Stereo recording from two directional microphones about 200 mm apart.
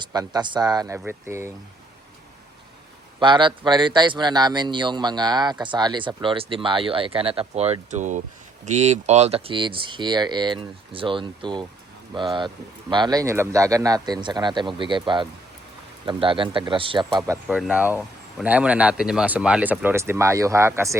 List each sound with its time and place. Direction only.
0.0 s speech: 20° right (ahead or behind)
3.2 s speech: 25° right (ahead or behind)
17.5 s speech: 5° right (ahead or behind)